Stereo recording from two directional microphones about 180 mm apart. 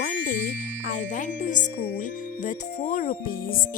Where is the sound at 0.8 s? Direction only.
45° left (ahead or behind).